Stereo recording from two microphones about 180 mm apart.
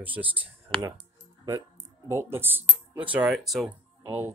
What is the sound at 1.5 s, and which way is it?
Speech, 20° right (ahead or behind).